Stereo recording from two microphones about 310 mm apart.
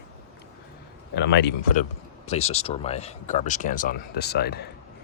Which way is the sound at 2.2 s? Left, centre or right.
Left.